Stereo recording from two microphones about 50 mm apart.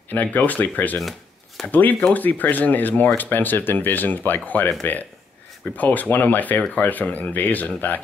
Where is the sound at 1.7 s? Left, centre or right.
Left.